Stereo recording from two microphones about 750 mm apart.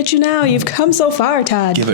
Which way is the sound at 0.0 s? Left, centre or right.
Left.